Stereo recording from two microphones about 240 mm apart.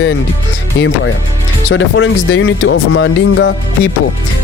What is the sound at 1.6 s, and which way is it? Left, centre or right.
Speech, left.